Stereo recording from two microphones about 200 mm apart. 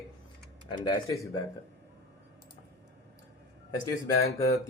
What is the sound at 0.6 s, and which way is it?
Speech, 20° left (ahead or behind).